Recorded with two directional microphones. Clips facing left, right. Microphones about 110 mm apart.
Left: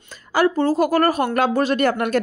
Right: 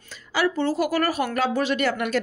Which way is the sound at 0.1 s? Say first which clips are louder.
Left 5 dB; 45° left (ahead or behind).